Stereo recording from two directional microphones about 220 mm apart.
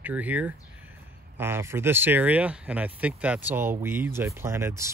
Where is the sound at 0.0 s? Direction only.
5° right (ahead or behind).